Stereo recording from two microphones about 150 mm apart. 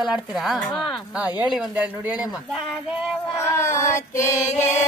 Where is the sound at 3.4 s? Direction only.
20° left (ahead or behind).